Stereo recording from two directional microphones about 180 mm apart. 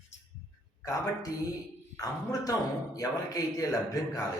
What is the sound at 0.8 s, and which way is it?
A man's voice, 20° left (ahead or behind).